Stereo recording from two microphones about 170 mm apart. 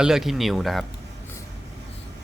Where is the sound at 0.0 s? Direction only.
Centre (ahead or behind).